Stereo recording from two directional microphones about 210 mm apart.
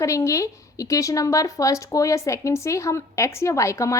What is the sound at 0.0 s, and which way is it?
A woman's voice, 15° left (ahead or behind).